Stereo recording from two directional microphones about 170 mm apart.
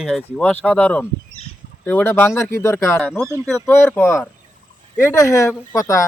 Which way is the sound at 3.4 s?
5° left (ahead or behind).